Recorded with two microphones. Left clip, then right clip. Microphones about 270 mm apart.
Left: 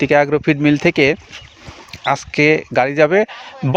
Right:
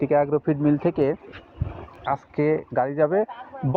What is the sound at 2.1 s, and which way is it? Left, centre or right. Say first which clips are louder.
Speech: left 10 dB; left.